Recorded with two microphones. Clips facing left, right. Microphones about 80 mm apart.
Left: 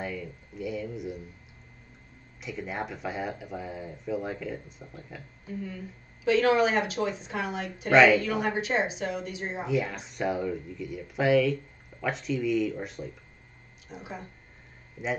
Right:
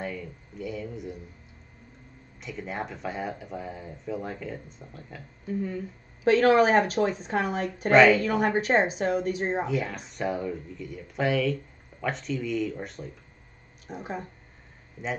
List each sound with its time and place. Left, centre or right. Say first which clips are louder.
0.0 s speech: even; centre
2.4 s speech: even; centre
6.2 s a woman's voice: right 3 dB; right
7.9 s speech: right 1 dB; centre
8.2 s a woman's voice: right 4 dB; right
9.7 s speech: left 1 dB; centre
13.8 s a woman's voice: right 5 dB; right